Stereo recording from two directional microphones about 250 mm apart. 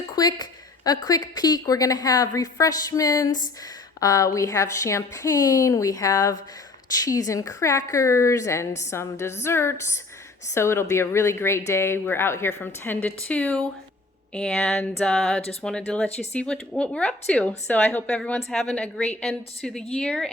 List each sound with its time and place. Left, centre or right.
0.2 s a woman's voice: centre